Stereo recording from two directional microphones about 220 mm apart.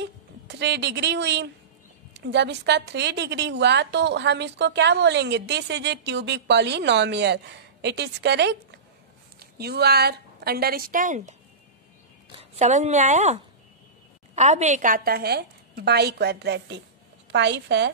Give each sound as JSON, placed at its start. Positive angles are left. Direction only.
{"t": 0.5, "sound": "a woman's voice", "side_deg": -50}